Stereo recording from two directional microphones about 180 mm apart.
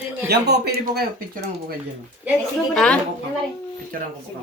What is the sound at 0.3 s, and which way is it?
Speech, 65° right (ahead or behind).